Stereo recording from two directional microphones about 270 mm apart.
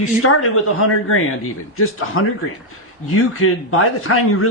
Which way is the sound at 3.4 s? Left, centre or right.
Left.